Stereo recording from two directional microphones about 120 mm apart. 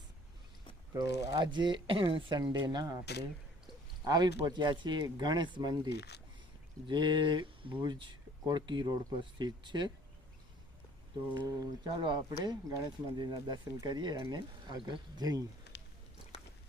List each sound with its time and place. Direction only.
0.9 s speech: 35° right (ahead or behind)
4.0 s speech: 35° right (ahead or behind)
11.3 s speech: 30° right (ahead or behind)